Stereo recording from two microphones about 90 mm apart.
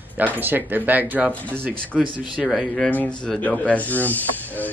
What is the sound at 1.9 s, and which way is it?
Speech, centre (ahead or behind).